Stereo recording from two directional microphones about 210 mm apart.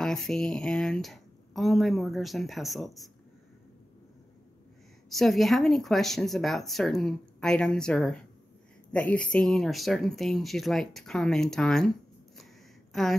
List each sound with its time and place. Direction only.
0.0 s speech: centre (ahead or behind)
5.1 s speech: centre (ahead or behind)
12.9 s speech: centre (ahead or behind)